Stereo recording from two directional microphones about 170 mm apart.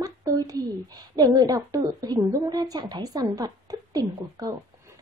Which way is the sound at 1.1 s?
20° right (ahead or behind).